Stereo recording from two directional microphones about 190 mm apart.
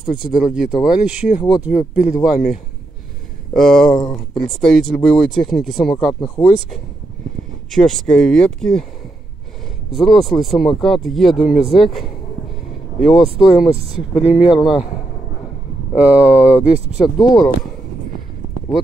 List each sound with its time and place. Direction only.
0.6 s speech: 5° right (ahead or behind)
7.7 s speech: 5° left (ahead or behind)
9.9 s speech: centre (ahead or behind)
15.9 s speech: 5° right (ahead or behind)
17.2 s speech: 20° left (ahead or behind)